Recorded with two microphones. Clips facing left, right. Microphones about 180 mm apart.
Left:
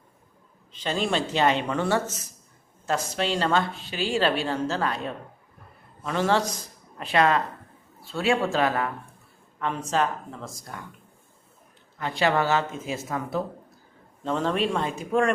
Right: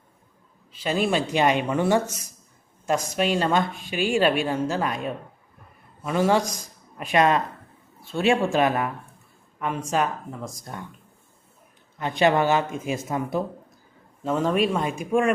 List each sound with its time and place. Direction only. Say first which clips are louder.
0.7 s a woman's voice: right 3 dB; 10° right (ahead or behind)
11.9 s a woman's voice: right 3 dB; 20° right (ahead or behind)